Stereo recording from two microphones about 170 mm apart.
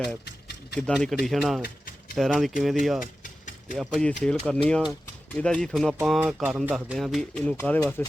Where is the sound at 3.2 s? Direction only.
50° left (ahead or behind).